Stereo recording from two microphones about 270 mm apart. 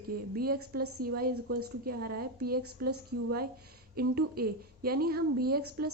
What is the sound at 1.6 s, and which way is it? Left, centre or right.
A woman's voice, right.